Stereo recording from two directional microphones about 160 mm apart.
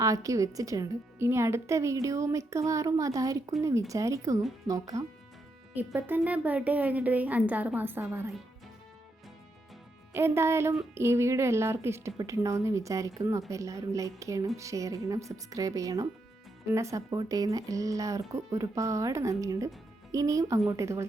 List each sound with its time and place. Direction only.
0.0 s a woman's voice: 20° right (ahead or behind)
10.2 s a woman's voice: 15° right (ahead or behind)